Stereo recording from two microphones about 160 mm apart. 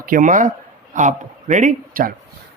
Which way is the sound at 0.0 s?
55° right (ahead or behind).